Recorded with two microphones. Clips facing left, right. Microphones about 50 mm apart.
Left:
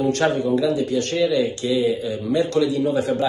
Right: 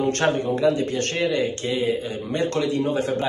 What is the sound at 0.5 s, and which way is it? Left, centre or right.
A man's voice, right.